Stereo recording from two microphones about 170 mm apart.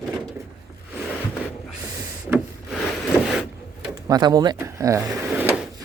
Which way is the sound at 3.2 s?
Centre (ahead or behind).